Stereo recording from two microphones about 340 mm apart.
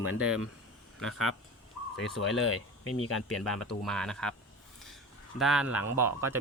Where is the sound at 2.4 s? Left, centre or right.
Left.